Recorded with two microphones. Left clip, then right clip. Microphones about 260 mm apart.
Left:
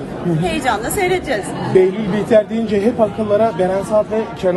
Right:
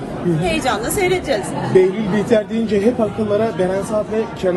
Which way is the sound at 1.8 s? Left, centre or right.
Left.